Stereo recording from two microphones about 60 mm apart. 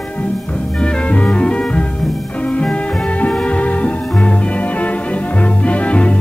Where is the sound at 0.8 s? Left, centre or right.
Centre.